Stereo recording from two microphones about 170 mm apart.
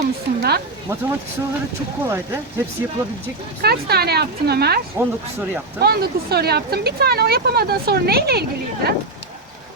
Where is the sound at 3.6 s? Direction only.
70° right (ahead or behind).